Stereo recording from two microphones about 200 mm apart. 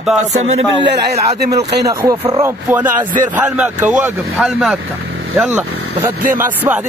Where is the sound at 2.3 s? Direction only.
10° right (ahead or behind).